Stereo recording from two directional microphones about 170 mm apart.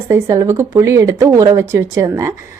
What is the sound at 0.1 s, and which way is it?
A woman's voice, 15° right (ahead or behind).